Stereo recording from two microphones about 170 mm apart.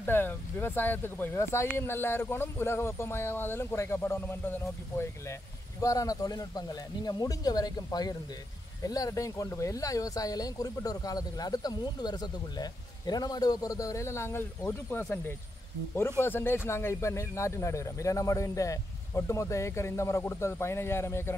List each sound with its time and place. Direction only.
0.0 s speech: 10° left (ahead or behind)